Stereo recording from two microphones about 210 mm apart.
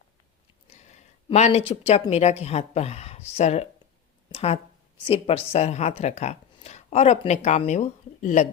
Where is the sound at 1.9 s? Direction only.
30° left (ahead or behind).